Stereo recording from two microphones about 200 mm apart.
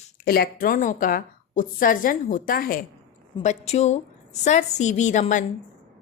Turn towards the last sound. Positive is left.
turn(degrees=40)  # may be behind; listen again after turning